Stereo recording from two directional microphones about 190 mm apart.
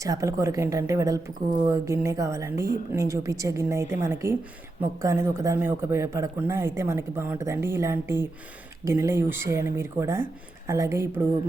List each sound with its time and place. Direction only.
0.0 s speech: 15° right (ahead or behind)